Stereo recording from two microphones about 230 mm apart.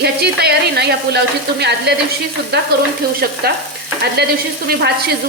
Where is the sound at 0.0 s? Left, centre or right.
Right.